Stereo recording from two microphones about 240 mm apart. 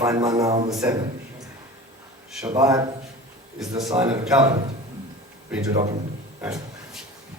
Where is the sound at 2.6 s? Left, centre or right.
Centre.